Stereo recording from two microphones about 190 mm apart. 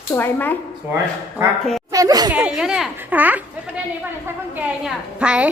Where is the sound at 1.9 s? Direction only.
20° right (ahead or behind).